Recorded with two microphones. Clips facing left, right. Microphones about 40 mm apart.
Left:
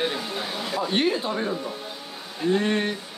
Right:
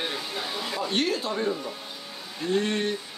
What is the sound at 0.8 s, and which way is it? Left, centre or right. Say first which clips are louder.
Speech: left 4 dB; centre.